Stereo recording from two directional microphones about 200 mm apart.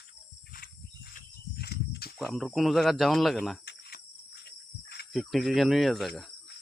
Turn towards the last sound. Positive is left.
turn(degrees=0)  # may be behind; listen again after turning